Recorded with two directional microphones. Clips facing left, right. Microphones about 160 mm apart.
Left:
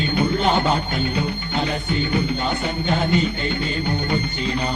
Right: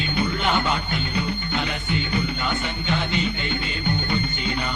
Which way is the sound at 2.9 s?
40° left (ahead or behind).